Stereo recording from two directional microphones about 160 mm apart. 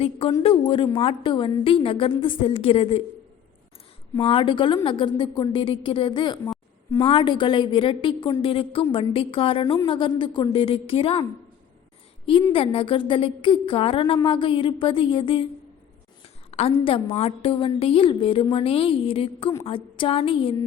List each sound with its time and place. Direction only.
0.0 s a woman's voice: 40° left (ahead or behind)
4.2 s a woman's voice: 35° left (ahead or behind)
16.5 s a woman's voice: 40° left (ahead or behind)